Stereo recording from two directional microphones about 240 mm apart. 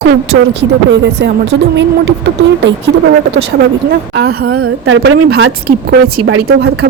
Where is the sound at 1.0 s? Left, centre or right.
Right.